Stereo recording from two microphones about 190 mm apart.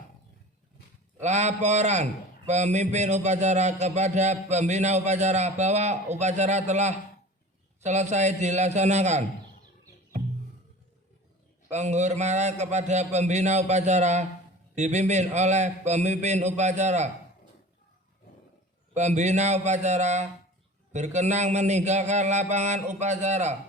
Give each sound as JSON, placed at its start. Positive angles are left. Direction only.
{"t": 1.2, "sound": "a man's voice", "side_deg": -35}
{"t": 11.7, "sound": "a man's voice", "side_deg": -35}
{"t": 18.9, "sound": "a man's voice", "side_deg": -35}